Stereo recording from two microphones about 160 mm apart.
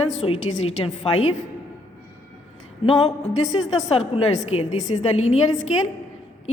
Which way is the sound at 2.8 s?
45° left (ahead or behind).